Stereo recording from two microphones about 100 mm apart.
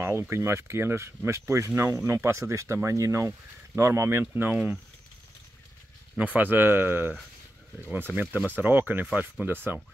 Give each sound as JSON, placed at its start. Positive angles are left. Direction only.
{"t": 0.0, "sound": "speech", "side_deg": -25}
{"t": 6.1, "sound": "speech", "side_deg": -15}